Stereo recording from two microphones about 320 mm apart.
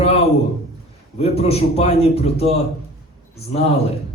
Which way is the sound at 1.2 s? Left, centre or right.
Centre.